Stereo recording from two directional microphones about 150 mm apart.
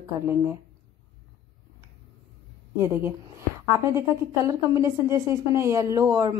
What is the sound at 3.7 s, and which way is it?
A woman's voice, 20° right (ahead or behind).